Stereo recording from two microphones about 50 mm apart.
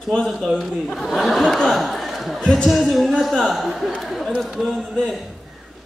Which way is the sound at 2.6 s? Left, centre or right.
Centre.